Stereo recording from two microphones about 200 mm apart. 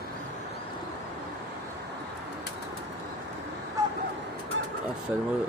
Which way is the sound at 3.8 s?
15° right (ahead or behind).